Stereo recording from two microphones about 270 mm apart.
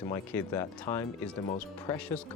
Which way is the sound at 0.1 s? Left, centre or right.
Centre.